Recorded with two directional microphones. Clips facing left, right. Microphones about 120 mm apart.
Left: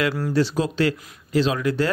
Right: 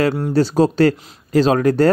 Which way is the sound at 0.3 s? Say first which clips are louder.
Right 6 dB; 40° right (ahead or behind).